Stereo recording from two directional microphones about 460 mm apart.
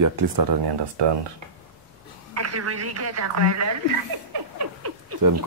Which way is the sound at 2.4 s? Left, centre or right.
Right.